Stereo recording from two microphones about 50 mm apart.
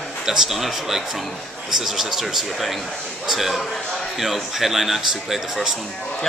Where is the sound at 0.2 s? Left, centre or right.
Centre.